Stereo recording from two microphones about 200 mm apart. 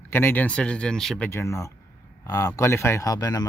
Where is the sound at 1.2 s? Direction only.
15° left (ahead or behind).